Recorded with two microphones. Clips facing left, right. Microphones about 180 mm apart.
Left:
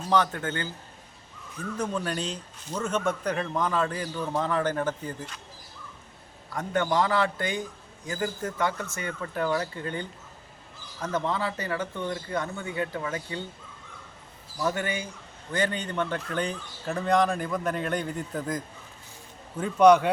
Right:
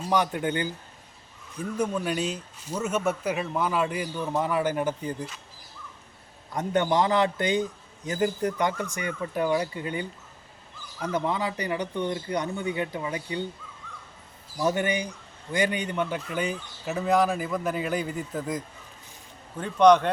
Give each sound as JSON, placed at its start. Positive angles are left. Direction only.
{"t": 0.1, "sound": "a man's voice", "side_deg": -15}
{"t": 1.8, "sound": "a man's voice", "side_deg": -10}
{"t": 6.5, "sound": "a man's voice", "side_deg": -20}
{"t": 14.6, "sound": "a man's voice", "side_deg": -20}